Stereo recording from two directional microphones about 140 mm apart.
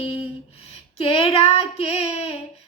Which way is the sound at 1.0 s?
40° left (ahead or behind).